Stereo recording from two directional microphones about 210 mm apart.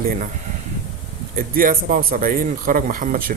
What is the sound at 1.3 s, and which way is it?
A man's voice, 40° right (ahead or behind).